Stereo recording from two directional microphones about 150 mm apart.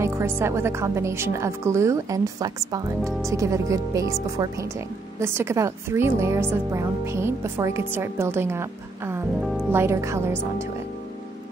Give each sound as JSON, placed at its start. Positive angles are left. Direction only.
{"t": 0.0, "sound": "speech", "side_deg": -20}
{"t": 9.4, "sound": "music", "side_deg": 0}
{"t": 9.7, "sound": "speech", "side_deg": -15}